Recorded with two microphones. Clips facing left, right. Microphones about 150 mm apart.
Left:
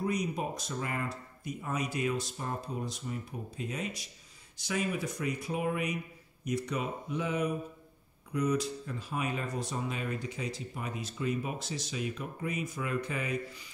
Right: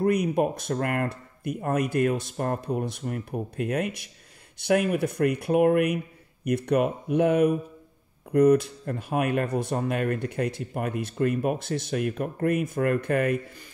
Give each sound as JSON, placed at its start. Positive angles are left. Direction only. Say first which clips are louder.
{"t": 0.0, "sound": "speech", "louder": "right 10 dB", "side_deg": -60}